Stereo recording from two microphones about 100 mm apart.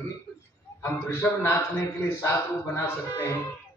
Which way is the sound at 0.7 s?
25° left (ahead or behind).